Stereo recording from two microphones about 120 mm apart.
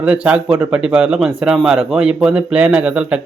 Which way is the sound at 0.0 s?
10° right (ahead or behind).